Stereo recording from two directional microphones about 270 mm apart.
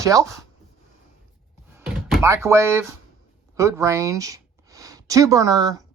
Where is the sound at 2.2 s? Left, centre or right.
Centre.